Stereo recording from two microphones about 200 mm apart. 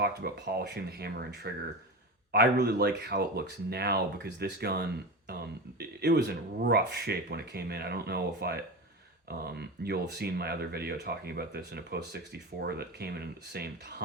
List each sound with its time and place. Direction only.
0.0 s speech: 55° right (ahead or behind)